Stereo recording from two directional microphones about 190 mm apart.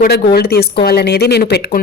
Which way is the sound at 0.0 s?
55° left (ahead or behind).